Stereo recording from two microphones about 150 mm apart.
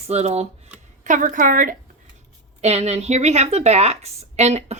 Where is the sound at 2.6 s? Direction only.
45° right (ahead or behind).